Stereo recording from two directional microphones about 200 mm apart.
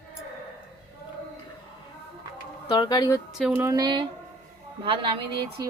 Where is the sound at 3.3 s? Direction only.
Centre (ahead or behind).